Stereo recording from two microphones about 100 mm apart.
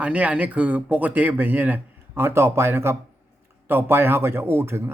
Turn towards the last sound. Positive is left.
turn(degrees=-25)  # may be behind; listen again after turning